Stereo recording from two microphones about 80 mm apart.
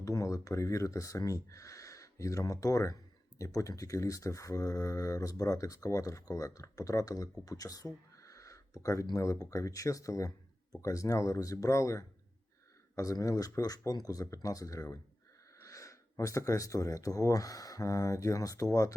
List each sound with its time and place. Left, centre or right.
0.0 s speech: left